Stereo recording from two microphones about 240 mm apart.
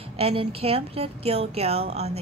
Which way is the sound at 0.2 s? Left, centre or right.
Right.